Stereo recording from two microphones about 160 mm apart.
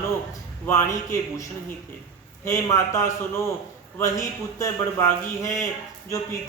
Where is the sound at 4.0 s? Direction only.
20° left (ahead or behind).